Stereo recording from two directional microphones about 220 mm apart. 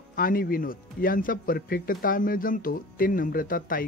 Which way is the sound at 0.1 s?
40° left (ahead or behind).